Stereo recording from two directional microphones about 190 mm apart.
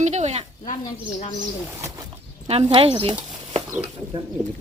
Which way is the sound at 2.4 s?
30° right (ahead or behind).